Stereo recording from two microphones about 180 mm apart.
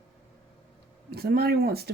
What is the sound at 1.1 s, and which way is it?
Speech, 60° right (ahead or behind).